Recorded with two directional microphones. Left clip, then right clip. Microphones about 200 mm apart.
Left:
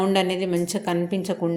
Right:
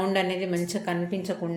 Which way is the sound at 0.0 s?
35° left (ahead or behind).